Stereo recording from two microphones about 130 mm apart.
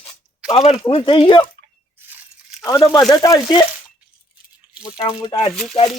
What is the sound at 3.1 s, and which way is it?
Speech, 30° left (ahead or behind).